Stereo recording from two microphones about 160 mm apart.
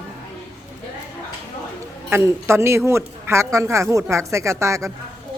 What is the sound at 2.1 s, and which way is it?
A woman's voice, 15° right (ahead or behind).